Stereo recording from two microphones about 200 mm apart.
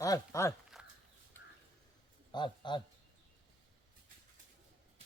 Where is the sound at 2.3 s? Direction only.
25° left (ahead or behind).